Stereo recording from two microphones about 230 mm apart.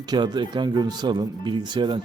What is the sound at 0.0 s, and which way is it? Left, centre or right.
A man's voice, centre.